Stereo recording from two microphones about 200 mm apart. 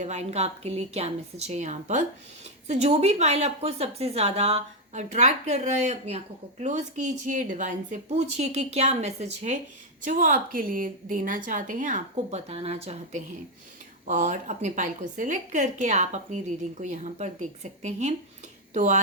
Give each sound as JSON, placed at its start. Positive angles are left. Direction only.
{"t": 0.0, "sound": "a woman's voice", "side_deg": -35}